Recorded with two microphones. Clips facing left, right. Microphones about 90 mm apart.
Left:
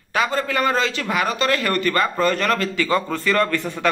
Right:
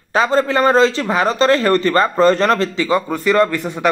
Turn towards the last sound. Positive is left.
turn(degrees=-20)  # may be behind; listen again after turning